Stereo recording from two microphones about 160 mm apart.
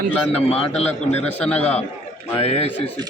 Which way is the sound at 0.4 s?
40° left (ahead or behind).